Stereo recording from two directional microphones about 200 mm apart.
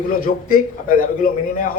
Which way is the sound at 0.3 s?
45° left (ahead or behind).